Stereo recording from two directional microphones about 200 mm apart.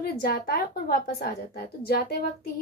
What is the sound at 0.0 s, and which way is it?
A woman's voice, 50° left (ahead or behind).